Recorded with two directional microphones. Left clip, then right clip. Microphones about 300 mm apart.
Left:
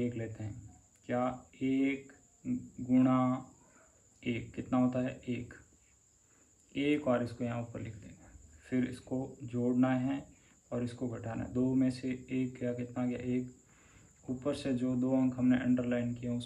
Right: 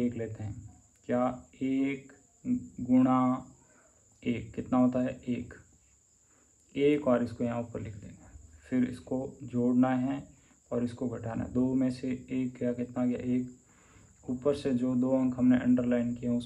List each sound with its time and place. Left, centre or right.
0.0 s speech: centre
6.7 s speech: centre